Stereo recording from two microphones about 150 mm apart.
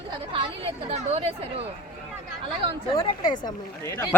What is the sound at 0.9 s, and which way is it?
Speech, 45° right (ahead or behind).